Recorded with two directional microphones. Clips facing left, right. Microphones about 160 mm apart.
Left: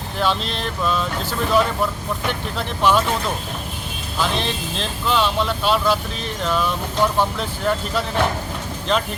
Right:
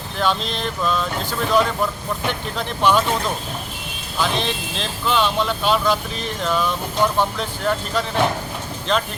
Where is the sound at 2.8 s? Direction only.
Centre (ahead or behind).